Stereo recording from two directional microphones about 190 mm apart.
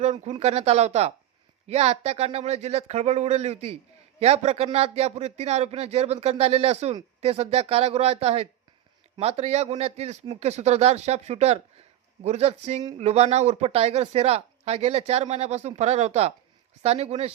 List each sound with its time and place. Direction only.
0.0 s speech: 35° right (ahead or behind)